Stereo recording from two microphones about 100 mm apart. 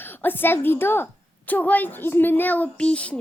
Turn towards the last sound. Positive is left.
turn(degrees=10)  # may be behind; listen again after turning